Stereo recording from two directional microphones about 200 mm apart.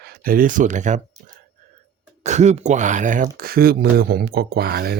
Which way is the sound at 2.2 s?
35° right (ahead or behind).